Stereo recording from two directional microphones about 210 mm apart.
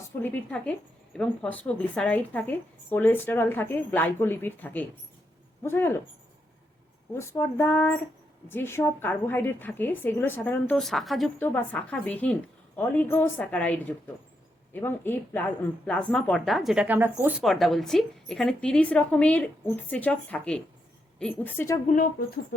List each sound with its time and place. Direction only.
0.2 s a woman's voice: 10° left (ahead or behind)
7.1 s a woman's voice: 15° left (ahead or behind)
21.8 s speech: 40° left (ahead or behind)